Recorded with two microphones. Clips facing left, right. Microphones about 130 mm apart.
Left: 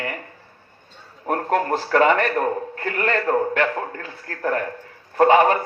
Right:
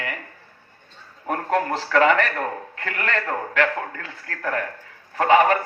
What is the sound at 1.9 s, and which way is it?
A man's voice, 40° left (ahead or behind).